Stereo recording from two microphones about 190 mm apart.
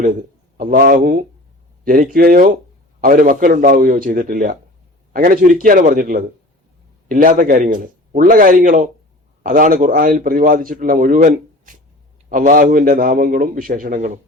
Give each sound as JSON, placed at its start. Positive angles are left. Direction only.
{"t": 0.5, "sound": "a man's voice", "side_deg": -45}